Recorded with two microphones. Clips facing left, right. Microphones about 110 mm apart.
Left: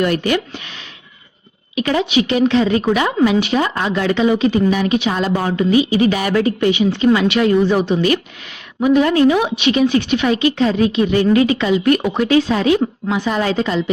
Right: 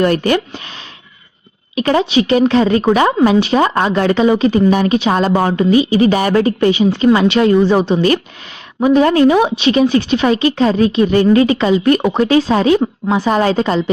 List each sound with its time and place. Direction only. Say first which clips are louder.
0.0 s a woman's voice: right 3 dB; 40° right (ahead or behind)
1.7 s a woman's voice: right 3 dB; 35° right (ahead or behind)